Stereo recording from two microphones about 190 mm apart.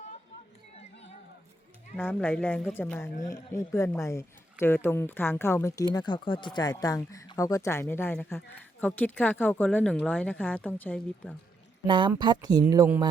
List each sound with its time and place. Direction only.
2.0 s speech: 10° left (ahead or behind)
11.9 s speech: 25° right (ahead or behind)